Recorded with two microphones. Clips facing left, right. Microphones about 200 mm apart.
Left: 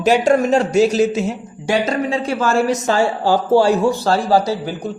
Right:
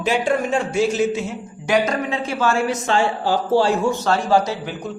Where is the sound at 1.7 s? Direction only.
30° left (ahead or behind).